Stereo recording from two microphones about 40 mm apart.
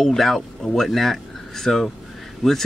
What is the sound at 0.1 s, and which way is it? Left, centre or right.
Speech, centre.